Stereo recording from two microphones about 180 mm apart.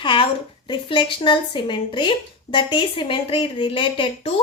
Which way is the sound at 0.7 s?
25° left (ahead or behind).